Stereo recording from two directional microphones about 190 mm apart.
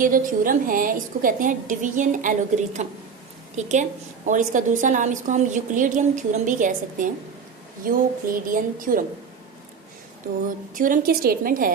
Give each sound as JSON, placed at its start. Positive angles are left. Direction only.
{"t": 0.0, "sound": "a woman's voice", "side_deg": -45}
{"t": 10.8, "sound": "a woman's voice", "side_deg": -45}